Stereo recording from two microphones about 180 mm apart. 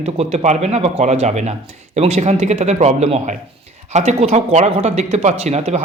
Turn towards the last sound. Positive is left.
turn(degrees=-40)  # may be behind; listen again after turning